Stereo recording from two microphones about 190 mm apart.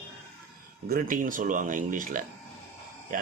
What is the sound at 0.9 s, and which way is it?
Speech, 45° right (ahead or behind).